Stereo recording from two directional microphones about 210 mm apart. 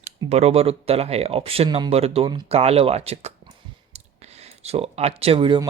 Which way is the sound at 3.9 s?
30° right (ahead or behind).